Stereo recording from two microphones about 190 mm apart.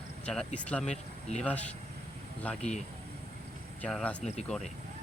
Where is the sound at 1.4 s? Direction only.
5° left (ahead or behind).